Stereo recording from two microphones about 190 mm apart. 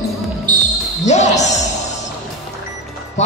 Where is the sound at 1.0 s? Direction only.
35° left (ahead or behind).